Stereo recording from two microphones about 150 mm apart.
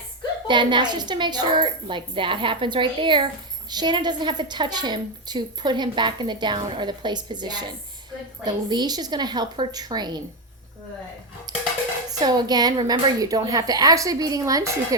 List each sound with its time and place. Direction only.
0.4 s a woman's voice: 30° right (ahead or behind)
11.5 s dishes: 30° right (ahead or behind)
12.2 s a woman's voice: 30° right (ahead or behind)